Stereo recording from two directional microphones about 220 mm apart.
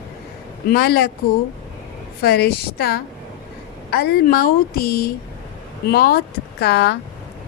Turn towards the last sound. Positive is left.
turn(degrees=50)  # may be behind; listen again after turning